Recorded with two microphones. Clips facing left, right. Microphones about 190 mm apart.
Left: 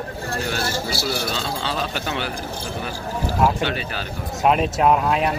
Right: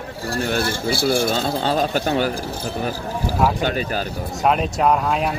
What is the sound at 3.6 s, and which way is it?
Speech, 40° right (ahead or behind).